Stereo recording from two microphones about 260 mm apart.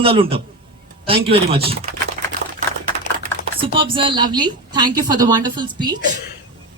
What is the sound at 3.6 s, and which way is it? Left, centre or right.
A woman's voice, centre.